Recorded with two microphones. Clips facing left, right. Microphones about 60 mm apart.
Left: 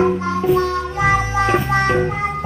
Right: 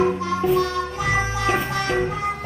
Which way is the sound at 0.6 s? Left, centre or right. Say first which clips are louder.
Left 4 dB; left.